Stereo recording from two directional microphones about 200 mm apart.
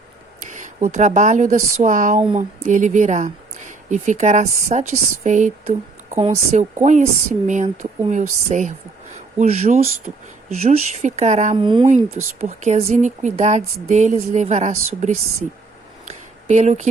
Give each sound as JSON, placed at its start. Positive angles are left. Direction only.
{"t": 0.5, "sound": "speech", "side_deg": -40}
{"t": 6.8, "sound": "speech", "side_deg": -40}
{"t": 12.1, "sound": "speech", "side_deg": -35}
{"t": 16.0, "sound": "a sound", "side_deg": -35}